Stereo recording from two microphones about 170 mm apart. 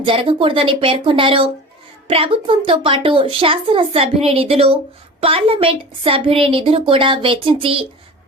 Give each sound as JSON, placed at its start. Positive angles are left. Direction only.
{"t": 0.0, "sound": "speech", "side_deg": -30}